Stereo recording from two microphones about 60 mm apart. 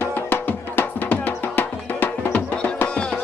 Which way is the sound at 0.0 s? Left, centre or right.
Left.